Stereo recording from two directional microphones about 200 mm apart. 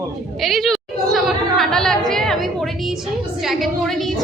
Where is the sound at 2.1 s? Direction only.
Centre (ahead or behind).